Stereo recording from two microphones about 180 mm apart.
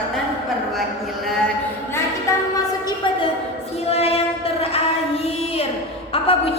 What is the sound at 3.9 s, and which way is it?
Music, 35° left (ahead or behind).